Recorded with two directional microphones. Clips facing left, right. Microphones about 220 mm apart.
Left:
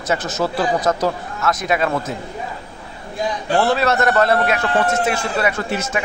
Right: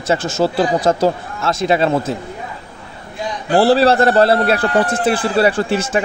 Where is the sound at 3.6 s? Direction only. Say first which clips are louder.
Right 6 dB; 30° right (ahead or behind).